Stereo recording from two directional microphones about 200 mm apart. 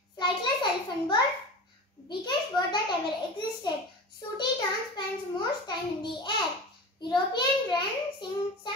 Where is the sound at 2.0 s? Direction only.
20° left (ahead or behind).